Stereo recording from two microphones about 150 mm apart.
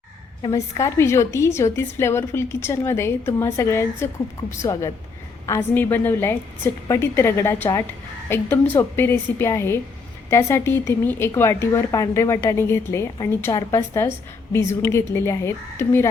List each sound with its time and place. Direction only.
0.4 s a woman's voice: 20° left (ahead or behind)